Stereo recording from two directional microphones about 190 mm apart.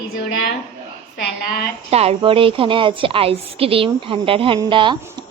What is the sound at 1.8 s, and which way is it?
A woman's voice, 30° right (ahead or behind).